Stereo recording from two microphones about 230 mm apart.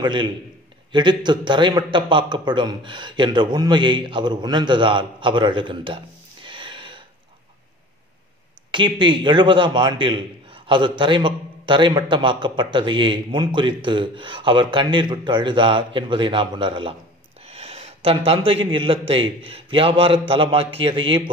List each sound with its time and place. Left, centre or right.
0.0 s a man's voice: centre
6.4 s a sound: right
8.7 s a man's voice: centre